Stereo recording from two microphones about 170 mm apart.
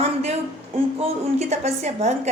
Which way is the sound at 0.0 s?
40° right (ahead or behind).